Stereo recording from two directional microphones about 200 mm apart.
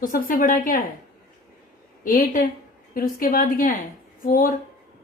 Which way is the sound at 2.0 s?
45° left (ahead or behind).